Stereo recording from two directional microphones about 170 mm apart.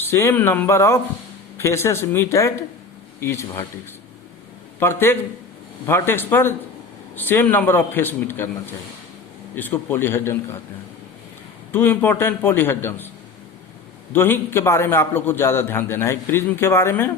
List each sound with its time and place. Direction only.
0.0 s a man's voice: 15° left (ahead or behind)
4.8 s a man's voice: 15° left (ahead or behind)
11.7 s a man's voice: 10° left (ahead or behind)
14.1 s a man's voice: 10° left (ahead or behind)